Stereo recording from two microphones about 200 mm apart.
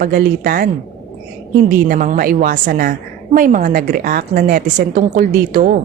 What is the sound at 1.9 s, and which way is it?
A woman's voice, 45° right (ahead or behind).